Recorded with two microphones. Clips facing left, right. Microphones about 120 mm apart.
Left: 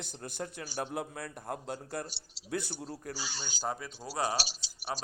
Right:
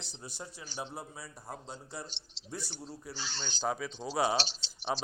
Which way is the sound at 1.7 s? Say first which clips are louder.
Left 6 dB; 50° left (ahead or behind).